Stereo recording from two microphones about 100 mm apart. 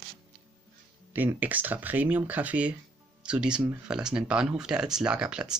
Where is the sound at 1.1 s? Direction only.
15° right (ahead or behind).